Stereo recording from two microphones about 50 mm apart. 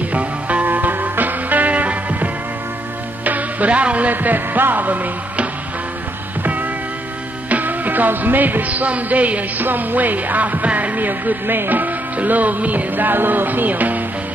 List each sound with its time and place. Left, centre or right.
0.1 s music: right
0.7 s music: right
3.3 s music: right
7.4 s speech: right